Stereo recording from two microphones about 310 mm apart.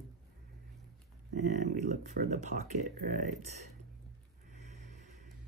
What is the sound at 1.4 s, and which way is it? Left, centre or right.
Speech, right.